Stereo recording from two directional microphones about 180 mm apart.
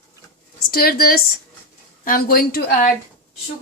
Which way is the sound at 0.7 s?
55° left (ahead or behind).